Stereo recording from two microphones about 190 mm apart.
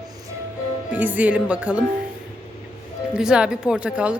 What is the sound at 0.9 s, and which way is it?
Speech, 10° right (ahead or behind).